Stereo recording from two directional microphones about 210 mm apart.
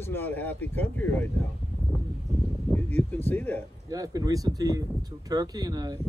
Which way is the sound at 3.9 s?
15° right (ahead or behind).